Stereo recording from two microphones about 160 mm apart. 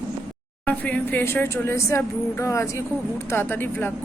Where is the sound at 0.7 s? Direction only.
10° left (ahead or behind).